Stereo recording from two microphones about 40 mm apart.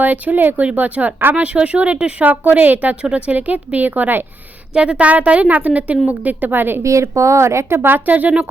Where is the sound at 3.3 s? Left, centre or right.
Right.